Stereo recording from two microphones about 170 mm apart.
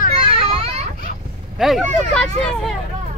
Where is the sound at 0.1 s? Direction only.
35° right (ahead or behind).